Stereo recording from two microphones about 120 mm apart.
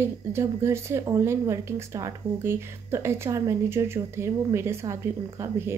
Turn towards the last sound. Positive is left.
turn(degrees=-20)  # may be behind; listen again after turning